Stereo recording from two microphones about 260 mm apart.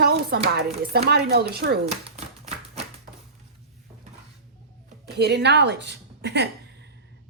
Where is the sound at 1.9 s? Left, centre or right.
Right.